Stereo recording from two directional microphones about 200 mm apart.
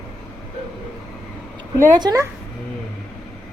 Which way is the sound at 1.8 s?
15° right (ahead or behind).